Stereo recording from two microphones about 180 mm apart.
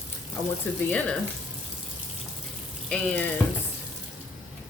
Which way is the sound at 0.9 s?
5° left (ahead or behind).